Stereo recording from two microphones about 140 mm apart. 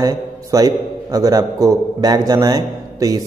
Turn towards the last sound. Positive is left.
turn(degrees=-25)  # may be behind; listen again after turning